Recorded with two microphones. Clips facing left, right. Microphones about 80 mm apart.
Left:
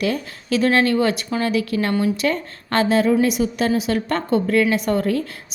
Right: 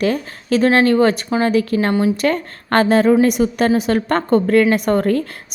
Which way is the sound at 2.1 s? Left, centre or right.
Right.